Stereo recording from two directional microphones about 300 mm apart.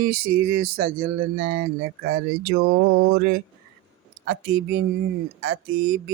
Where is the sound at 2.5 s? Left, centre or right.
Right.